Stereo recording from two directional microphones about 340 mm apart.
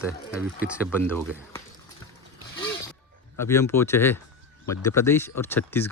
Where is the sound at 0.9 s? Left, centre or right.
Centre.